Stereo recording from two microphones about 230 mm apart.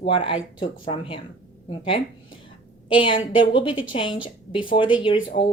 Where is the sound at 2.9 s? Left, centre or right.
Left.